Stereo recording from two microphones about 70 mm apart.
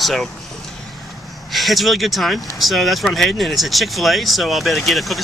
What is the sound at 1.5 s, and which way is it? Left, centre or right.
Speech, centre.